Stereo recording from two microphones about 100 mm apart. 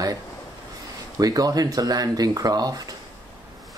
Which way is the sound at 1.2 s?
40° right (ahead or behind).